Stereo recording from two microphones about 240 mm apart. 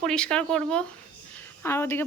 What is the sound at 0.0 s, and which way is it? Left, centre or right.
Speech, centre.